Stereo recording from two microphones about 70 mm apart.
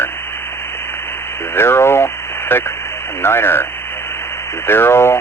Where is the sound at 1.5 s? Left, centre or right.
Left.